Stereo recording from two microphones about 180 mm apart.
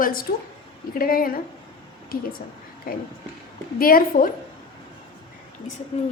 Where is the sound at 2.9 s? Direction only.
55° left (ahead or behind).